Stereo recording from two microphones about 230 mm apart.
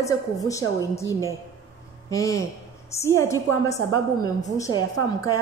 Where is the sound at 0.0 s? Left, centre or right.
Centre.